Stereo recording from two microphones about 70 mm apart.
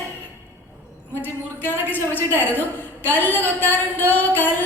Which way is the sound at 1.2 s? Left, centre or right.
Left.